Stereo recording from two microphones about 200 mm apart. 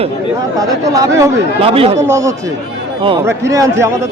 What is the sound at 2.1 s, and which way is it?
A man's voice, 15° right (ahead or behind).